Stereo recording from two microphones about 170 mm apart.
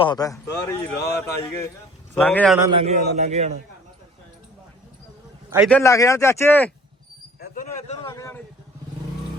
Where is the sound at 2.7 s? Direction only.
40° right (ahead or behind).